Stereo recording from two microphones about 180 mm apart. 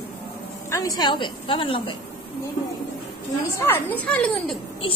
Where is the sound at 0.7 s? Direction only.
20° left (ahead or behind).